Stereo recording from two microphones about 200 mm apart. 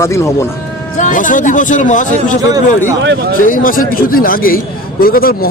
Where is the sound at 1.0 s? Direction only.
40° left (ahead or behind).